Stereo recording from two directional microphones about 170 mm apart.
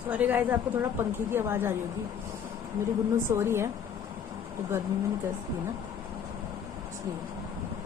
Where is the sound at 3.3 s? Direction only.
15° right (ahead or behind).